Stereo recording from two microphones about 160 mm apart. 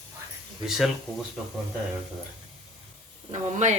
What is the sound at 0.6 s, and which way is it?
Speech, centre (ahead or behind).